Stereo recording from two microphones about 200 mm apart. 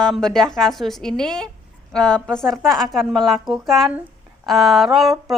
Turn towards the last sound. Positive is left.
turn(degrees=0)  # may be behind; listen again after turning